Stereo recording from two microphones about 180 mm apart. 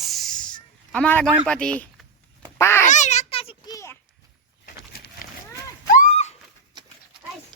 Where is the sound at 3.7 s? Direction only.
15° left (ahead or behind).